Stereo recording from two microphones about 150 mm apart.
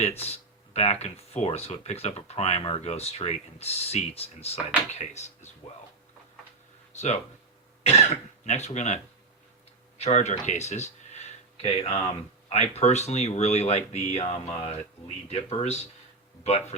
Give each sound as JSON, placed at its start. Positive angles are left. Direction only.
{"t": 0.0, "sound": "speech", "side_deg": 45}
{"t": 6.9, "sound": "speech", "side_deg": 50}
{"t": 8.4, "sound": "speech", "side_deg": 50}
{"t": 10.0, "sound": "speech", "side_deg": 45}